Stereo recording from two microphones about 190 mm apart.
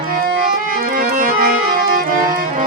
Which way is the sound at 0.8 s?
50° right (ahead or behind).